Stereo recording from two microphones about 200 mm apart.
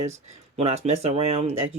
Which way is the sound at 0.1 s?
35° right (ahead or behind).